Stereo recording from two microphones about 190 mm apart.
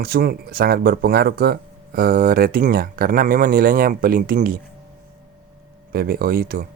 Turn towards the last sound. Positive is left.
turn(degrees=-50)  # may be behind; listen again after turning